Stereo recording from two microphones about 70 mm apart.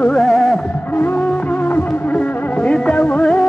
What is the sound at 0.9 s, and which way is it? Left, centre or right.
Music, left.